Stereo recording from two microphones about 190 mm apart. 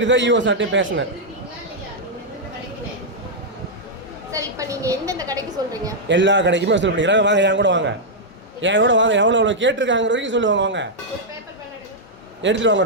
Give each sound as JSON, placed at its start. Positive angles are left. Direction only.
{"t": 0.0, "sound": "a man's voice", "side_deg": -70}
{"t": 4.3, "sound": "a woman's voice", "side_deg": -15}
{"t": 6.1, "sound": "a man's voice", "side_deg": -70}
{"t": 12.4, "sound": "a man's voice", "side_deg": -75}